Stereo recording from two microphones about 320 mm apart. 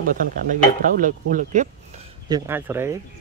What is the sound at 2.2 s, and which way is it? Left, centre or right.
Speech, centre.